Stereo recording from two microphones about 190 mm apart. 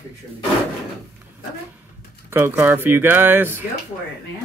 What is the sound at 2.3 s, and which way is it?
Speech, 10° right (ahead or behind).